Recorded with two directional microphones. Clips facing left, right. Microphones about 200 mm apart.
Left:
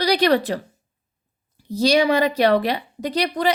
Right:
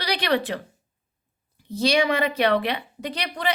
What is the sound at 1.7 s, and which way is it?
Speech, 40° left (ahead or behind).